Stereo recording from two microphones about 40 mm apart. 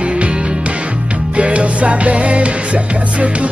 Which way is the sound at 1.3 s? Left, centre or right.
Right.